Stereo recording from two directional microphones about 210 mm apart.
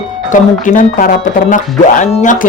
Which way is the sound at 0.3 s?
40° left (ahead or behind).